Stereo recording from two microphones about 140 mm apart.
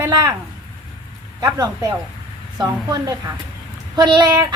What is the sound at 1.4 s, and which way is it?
A woman's voice, 25° right (ahead or behind).